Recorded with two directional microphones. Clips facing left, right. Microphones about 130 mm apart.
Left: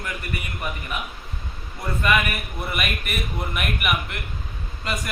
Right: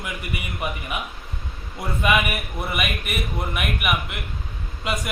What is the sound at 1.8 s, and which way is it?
Speech, 20° right (ahead or behind).